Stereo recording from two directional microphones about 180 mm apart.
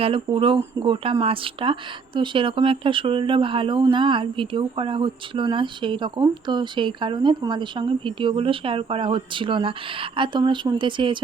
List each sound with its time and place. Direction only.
0.0 s speech: 30° right (ahead or behind)